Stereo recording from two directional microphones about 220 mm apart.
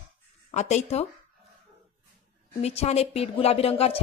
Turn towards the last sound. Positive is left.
turn(degrees=25)  # may be behind; listen again after turning